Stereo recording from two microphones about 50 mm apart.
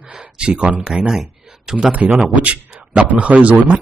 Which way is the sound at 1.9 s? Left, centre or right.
Right.